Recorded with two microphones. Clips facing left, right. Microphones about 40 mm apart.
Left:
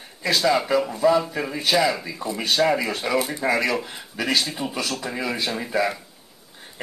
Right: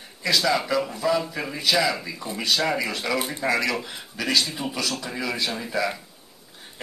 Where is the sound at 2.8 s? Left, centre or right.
Left.